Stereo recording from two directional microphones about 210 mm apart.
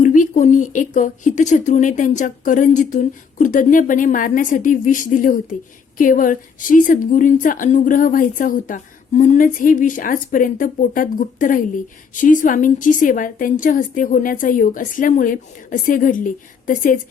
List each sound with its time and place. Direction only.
0.0 s a woman's voice: 35° left (ahead or behind)